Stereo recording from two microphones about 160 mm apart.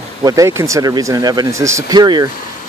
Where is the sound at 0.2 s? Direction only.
20° right (ahead or behind).